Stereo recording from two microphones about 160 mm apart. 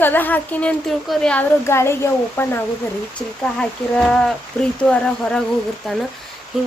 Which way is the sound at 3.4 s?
5° left (ahead or behind).